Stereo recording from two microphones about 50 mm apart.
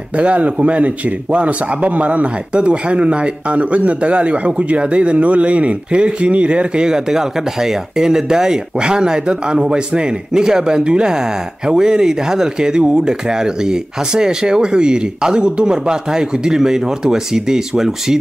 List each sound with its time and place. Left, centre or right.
0.2 s speech: right; by 18.1 s centre